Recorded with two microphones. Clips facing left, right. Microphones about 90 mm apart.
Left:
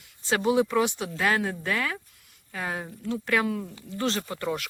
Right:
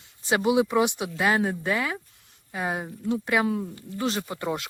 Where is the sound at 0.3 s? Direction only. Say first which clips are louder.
Right 1 dB; 15° right (ahead or behind).